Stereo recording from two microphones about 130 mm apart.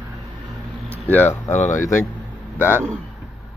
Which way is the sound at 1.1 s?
15° left (ahead or behind).